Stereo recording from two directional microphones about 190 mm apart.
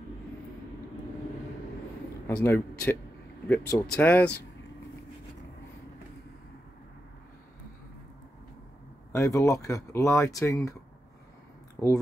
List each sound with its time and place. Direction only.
2.2 s a man's voice: 10° left (ahead or behind)
9.1 s speech: 15° left (ahead or behind)
11.8 s speech: 15° left (ahead or behind)